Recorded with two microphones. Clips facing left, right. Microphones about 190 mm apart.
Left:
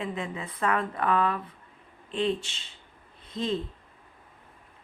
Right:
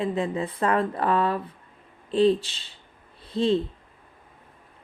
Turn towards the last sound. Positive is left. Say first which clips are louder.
# right 7 dB
turn(degrees=-30)  # may be behind; listen again after turning